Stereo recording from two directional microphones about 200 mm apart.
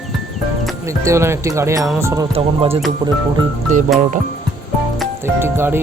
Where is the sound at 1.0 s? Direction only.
15° right (ahead or behind).